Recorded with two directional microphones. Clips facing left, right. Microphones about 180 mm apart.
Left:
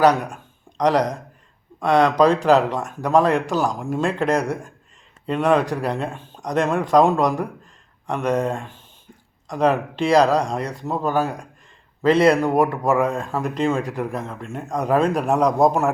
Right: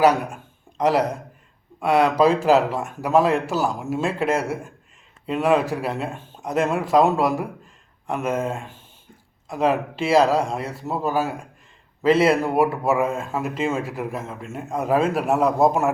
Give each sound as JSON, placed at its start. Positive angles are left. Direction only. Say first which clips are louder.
{"t": 0.0, "sound": "speech", "louder": "left 1 dB", "side_deg": -10}